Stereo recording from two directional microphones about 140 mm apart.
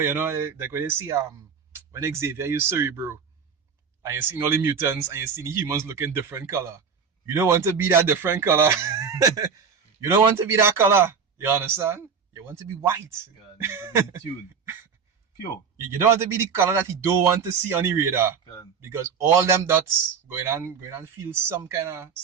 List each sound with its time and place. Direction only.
0.0 s speech: 15° right (ahead or behind)
14.6 s a sound: 15° right (ahead or behind)
15.8 s speech: 20° right (ahead or behind)
18.4 s speech: 30° left (ahead or behind)
18.8 s speech: 20° right (ahead or behind)